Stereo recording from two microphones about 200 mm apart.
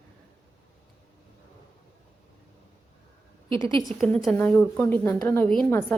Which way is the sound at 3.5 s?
25° right (ahead or behind).